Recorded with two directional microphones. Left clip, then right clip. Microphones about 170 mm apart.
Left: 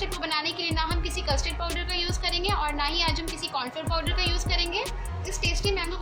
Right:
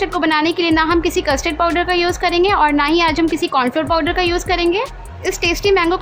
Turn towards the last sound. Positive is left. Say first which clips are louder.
# right 13 dB
turn(degrees=-50)  # may be behind; listen again after turning